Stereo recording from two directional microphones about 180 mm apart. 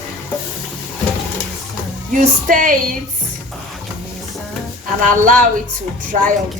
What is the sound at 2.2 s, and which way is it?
Speech, 50° right (ahead or behind).